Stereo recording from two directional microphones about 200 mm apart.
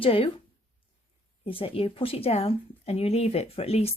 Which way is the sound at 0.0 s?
25° left (ahead or behind).